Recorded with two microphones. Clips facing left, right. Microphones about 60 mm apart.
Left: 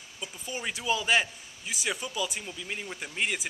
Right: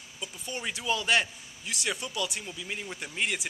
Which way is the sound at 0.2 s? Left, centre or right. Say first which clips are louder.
Even; centre.